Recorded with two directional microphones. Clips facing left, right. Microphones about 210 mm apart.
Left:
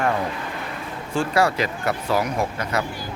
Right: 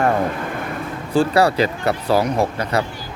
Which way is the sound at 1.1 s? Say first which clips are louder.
Right 5 dB; 35° right (ahead or behind).